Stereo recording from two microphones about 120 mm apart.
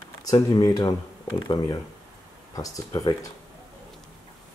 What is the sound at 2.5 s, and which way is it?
Speech, 30° left (ahead or behind).